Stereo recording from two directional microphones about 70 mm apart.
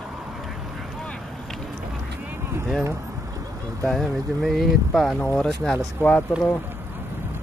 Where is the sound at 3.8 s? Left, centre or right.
Centre.